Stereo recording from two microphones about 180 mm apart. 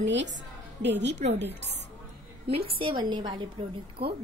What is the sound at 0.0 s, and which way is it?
A woman's voice, 80° right.